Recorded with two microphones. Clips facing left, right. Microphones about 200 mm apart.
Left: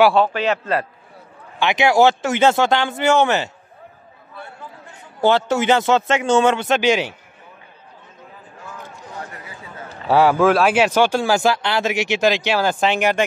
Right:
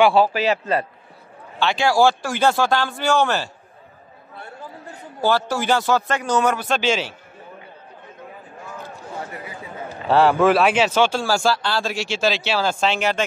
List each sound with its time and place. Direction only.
0.0 s a man's voice: 5° right (ahead or behind)
1.6 s a man's voice: 20° left (ahead or behind)
5.2 s a man's voice: 20° left (ahead or behind)
10.0 s a man's voice: 10° left (ahead or behind)
10.8 s speech: 15° left (ahead or behind)